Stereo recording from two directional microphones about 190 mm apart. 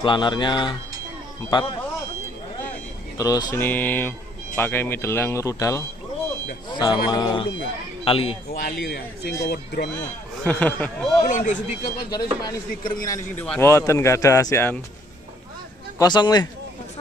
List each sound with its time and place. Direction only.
0.0 s speech: 25° left (ahead or behind)
3.2 s speech: 20° left (ahead or behind)
3.6 s speech: 10° left (ahead or behind)
6.7 s music: 20° left (ahead or behind)
7.1 s a man's voice: 20° left (ahead or behind)
8.5 s speech: 55° left (ahead or behind)
10.4 s speech: 5° left (ahead or behind)
11.2 s a man's voice: 40° left (ahead or behind)
12.1 s speech: 20° left (ahead or behind)
16.0 s speech: 20° left (ahead or behind)